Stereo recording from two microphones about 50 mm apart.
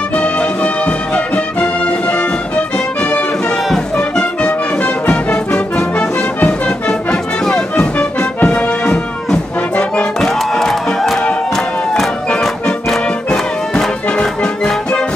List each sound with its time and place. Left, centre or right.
0.1 s music: left
8.4 s music: left
8.6 s music: centre
10.2 s music: centre
12.3 s music: centre